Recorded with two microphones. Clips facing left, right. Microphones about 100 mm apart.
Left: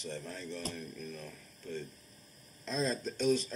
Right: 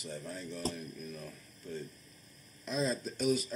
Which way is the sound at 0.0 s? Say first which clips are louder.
Even; 10° right (ahead or behind).